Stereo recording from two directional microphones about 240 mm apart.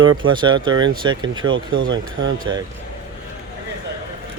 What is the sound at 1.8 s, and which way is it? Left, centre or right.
Speech, right.